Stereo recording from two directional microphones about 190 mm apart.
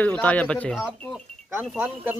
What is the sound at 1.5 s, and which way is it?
Speech, 10° right (ahead or behind).